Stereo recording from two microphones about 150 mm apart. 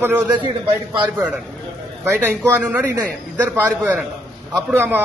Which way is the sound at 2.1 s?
15° right (ahead or behind).